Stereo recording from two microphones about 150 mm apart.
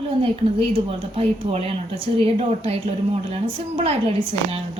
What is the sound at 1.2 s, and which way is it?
Speech, 40° right (ahead or behind).